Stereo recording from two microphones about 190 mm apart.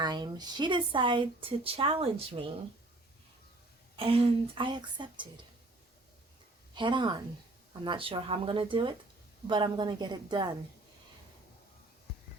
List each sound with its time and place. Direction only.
0.0 s speech: 20° right (ahead or behind)
3.9 s speech: 30° right (ahead or behind)
6.7 s speech: 25° right (ahead or behind)